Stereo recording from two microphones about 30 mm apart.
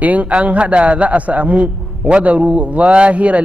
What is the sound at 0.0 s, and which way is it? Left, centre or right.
Speech, right.